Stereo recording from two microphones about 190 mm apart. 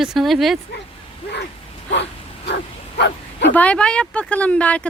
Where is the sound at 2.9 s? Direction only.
65° left (ahead or behind).